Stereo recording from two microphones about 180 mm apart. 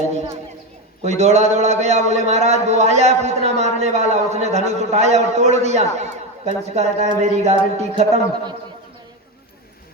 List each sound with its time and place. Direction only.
1.0 s a man's voice: 40° right (ahead or behind)